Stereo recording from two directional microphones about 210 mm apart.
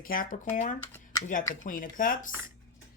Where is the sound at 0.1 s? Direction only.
40° left (ahead or behind).